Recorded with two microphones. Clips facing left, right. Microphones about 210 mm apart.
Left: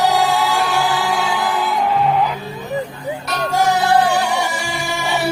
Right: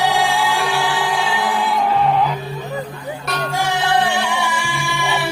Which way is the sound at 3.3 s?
40° left (ahead or behind).